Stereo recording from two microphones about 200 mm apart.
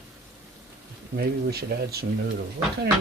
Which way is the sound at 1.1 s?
50° right (ahead or behind).